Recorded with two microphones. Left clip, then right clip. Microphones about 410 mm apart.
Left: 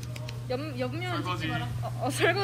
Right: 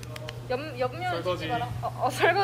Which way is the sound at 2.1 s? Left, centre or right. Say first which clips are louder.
Right 2 dB; centre.